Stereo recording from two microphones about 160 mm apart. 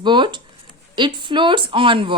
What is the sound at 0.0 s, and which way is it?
Speech, 30° right (ahead or behind).